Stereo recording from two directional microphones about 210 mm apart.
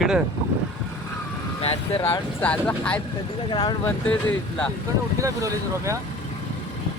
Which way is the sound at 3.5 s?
20° left (ahead or behind).